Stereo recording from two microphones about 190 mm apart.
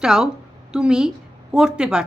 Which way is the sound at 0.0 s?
5° right (ahead or behind).